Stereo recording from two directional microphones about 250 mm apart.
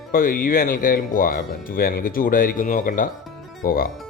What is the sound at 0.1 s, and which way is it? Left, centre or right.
Speech, left.